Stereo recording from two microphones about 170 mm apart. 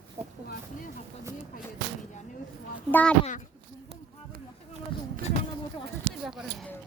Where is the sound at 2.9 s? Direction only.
10° left (ahead or behind).